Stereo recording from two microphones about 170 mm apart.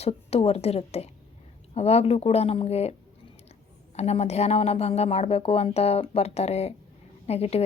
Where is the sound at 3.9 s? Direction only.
40° left (ahead or behind).